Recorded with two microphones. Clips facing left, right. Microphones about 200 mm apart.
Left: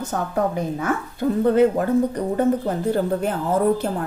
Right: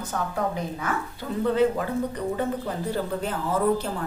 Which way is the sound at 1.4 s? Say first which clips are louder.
Left 4 dB; 50° left (ahead or behind).